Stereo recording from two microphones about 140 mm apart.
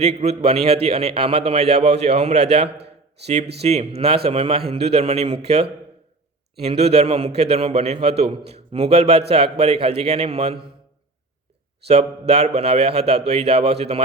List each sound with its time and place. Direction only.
0.0 s a man's voice: 50° right (ahead or behind)
11.9 s a man's voice: 50° right (ahead or behind)